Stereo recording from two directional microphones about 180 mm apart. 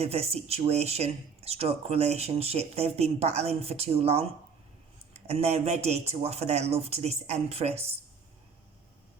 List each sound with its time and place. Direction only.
0.0 s speech: 35° right (ahead or behind)